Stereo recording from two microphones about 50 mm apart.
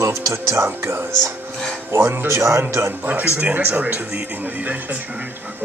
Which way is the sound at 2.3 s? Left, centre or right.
Right.